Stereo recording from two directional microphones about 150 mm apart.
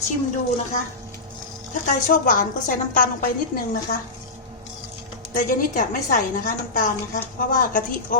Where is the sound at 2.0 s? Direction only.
65° left (ahead or behind).